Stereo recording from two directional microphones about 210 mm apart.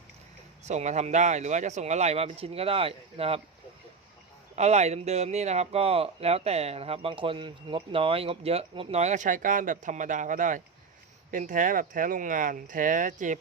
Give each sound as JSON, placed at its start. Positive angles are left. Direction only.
{"t": 0.6, "sound": "speech", "side_deg": -35}
{"t": 4.5, "sound": "speech", "side_deg": -30}